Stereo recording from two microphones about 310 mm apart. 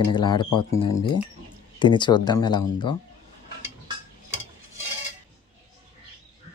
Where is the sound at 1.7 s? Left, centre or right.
Centre.